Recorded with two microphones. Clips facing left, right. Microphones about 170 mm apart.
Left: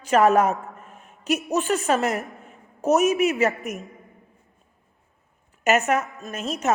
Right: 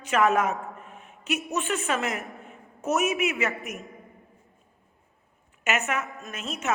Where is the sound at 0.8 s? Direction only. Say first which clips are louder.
Even; 40° left (ahead or behind).